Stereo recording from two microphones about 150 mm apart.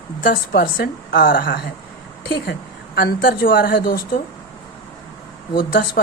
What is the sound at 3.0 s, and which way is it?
Speech, 85° left.